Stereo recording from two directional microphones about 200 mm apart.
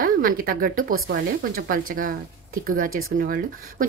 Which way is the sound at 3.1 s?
45° right (ahead or behind).